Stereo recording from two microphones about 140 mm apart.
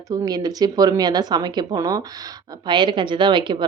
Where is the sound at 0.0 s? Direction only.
25° right (ahead or behind).